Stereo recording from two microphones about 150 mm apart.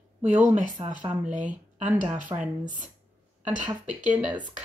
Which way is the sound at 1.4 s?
55° right (ahead or behind).